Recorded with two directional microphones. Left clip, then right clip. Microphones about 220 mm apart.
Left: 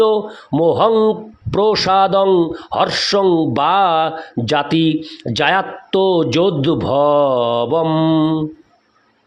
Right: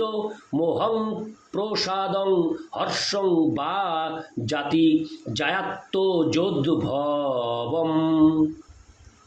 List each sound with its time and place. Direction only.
0.0 s speech: 45° left (ahead or behind)